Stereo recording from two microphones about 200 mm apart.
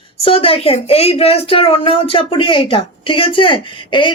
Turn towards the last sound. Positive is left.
turn(degrees=25)  # may be behind; listen again after turning